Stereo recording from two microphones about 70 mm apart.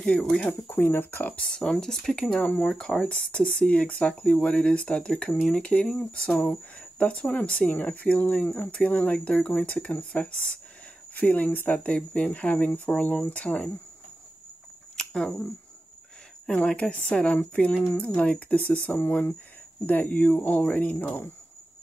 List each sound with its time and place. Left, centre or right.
0.0 s speech: centre
0.5 s speech: left
1.3 s speech: centre
2.4 s speech: left
2.7 s speech: centre
15.0 s a sound: centre
16.4 s speech: centre